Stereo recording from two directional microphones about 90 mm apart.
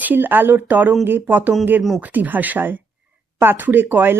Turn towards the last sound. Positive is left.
turn(degrees=-20)  # may be behind; listen again after turning